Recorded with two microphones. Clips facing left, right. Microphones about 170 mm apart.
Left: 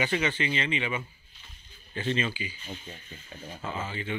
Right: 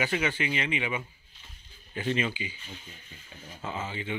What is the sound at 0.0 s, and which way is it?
A man's voice, 10° right (ahead or behind).